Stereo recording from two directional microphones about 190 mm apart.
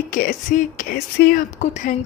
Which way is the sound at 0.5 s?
45° left (ahead or behind).